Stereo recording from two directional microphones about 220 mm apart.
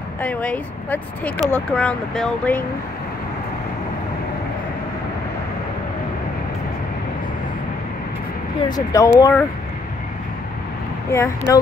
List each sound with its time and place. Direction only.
0.2 s speech: 5° left (ahead or behind)
8.6 s speech: 15° left (ahead or behind)
11.1 s speech: 15° left (ahead or behind)